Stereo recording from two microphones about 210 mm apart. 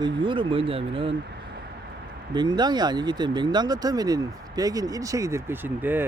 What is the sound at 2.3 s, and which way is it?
Speech, 20° right (ahead or behind).